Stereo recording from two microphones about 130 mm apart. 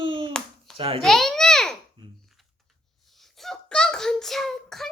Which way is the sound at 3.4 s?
5° left (ahead or behind).